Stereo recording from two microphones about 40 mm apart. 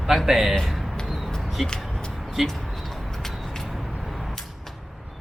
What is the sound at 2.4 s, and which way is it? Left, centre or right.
Speech, centre.